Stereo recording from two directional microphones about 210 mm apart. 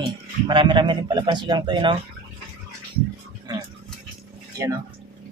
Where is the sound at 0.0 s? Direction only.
20° right (ahead or behind).